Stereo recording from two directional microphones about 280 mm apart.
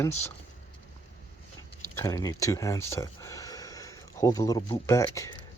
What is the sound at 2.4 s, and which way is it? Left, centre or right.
Cutlery, centre.